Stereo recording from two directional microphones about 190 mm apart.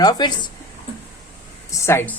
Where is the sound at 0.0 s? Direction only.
20° left (ahead or behind).